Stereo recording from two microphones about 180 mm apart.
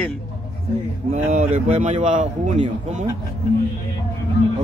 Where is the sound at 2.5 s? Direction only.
30° right (ahead or behind).